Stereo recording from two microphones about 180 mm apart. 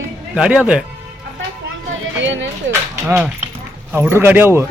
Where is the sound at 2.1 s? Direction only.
90° right.